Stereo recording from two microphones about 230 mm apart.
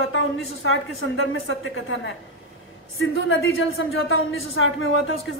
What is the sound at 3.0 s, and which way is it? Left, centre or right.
Speech, left.